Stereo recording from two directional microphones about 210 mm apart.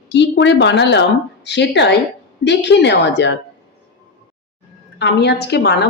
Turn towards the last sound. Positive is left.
turn(degrees=50)  # may be behind; listen again after turning